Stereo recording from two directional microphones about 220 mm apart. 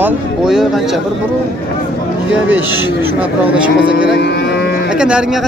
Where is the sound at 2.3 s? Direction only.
5° right (ahead or behind).